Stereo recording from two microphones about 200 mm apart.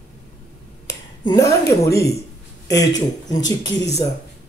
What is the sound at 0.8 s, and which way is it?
A man's voice, 20° left (ahead or behind).